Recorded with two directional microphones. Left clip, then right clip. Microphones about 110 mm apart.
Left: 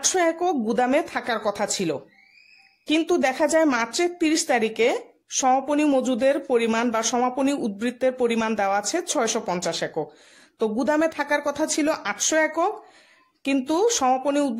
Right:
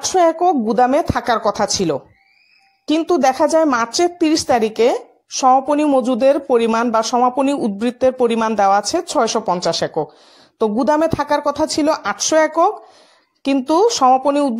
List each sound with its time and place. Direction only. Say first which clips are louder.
0.1 s a woman's voice: right 12 dB; 30° right (ahead or behind)
3.2 s a woman's voice: right 8 dB; 40° right (ahead or behind)
3.7 s a woman's voice: right 7 dB; 45° right (ahead or behind)
5.3 s a woman's voice: right 8 dB; 25° right (ahead or behind)
6.6 s a woman's voice: right 7 dB; 45° right (ahead or behind)
7.0 s a woman's voice: right 8 dB; 25° right (ahead or behind)
9.7 s a woman's voice: right 8 dB; 45° right (ahead or behind)
10.6 s a woman's voice: right 7 dB; 35° right (ahead or behind)